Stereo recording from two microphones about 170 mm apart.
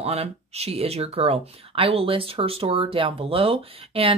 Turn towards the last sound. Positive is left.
turn(degrees=-35)  # may be behind; listen again after turning